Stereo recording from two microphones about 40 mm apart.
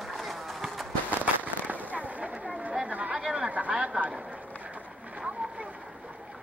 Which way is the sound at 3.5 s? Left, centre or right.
Right.